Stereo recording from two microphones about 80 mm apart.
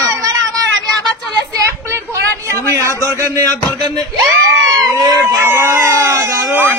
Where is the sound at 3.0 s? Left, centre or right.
Right.